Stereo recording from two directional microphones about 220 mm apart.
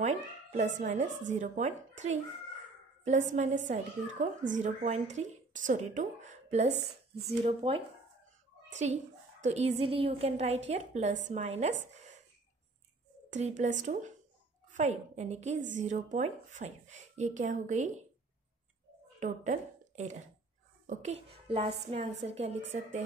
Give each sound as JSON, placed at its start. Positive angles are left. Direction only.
{"t": 0.0, "sound": "a woman's voice", "side_deg": -30}
{"t": 9.4, "sound": "a woman's voice", "side_deg": -30}
{"t": 13.4, "sound": "speech", "side_deg": -35}
{"t": 19.1, "sound": "a woman's voice", "side_deg": -35}